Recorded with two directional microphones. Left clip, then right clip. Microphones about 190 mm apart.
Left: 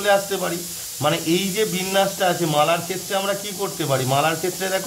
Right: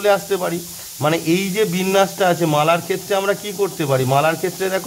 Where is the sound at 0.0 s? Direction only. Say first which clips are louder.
Right 2 dB; 30° right (ahead or behind).